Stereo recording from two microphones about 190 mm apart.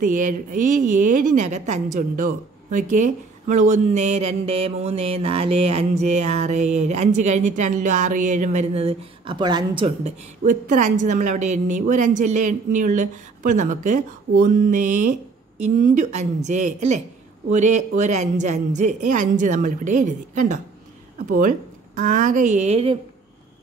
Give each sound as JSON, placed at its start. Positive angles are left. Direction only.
{"t": 0.0, "sound": "a woman's voice", "side_deg": -45}
{"t": 10.4, "sound": "a woman's voice", "side_deg": -40}